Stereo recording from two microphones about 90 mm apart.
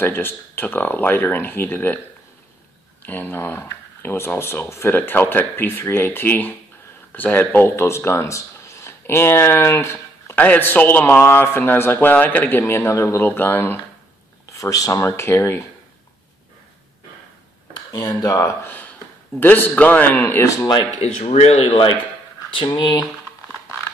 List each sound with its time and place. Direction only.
0.0 s speech: 25° left (ahead or behind)
3.0 s speech: 20° left (ahead or behind)
10.4 s speech: 20° left (ahead or behind)
14.5 s speech: 40° left (ahead or behind)
17.9 s speech: 40° left (ahead or behind)
19.4 s speech: 20° left (ahead or behind)
21.2 s speech: 90° left
22.8 s speech: 55° left (ahead or behind)